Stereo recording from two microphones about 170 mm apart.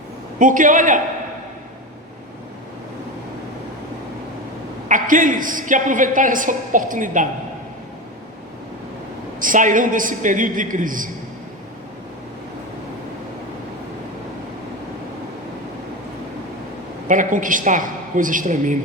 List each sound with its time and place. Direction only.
0.3 s a woman's voice: 50° right (ahead or behind)
4.9 s a woman's voice: 50° right (ahead or behind)
9.4 s a woman's voice: 50° right (ahead or behind)
17.1 s a woman's voice: 50° right (ahead or behind)